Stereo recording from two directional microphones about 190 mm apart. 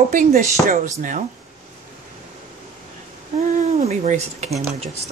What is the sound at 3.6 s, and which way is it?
Speech, 35° right (ahead or behind).